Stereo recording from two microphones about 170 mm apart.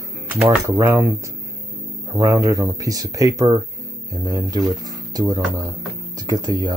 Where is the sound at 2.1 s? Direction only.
20° right (ahead or behind).